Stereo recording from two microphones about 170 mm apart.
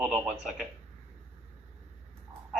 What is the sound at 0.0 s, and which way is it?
Speech, centre (ahead or behind).